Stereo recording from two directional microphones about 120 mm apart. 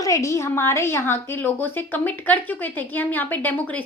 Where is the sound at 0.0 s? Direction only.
25° left (ahead or behind).